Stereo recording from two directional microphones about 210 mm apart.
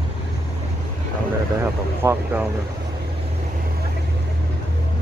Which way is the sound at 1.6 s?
10° right (ahead or behind).